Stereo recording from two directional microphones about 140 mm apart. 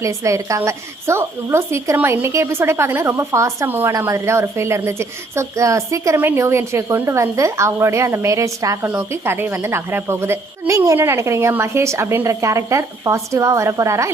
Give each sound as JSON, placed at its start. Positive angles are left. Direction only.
{"t": 0.0, "sound": "speech", "side_deg": -20}